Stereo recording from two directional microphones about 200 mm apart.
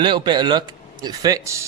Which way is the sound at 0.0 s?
20° right (ahead or behind).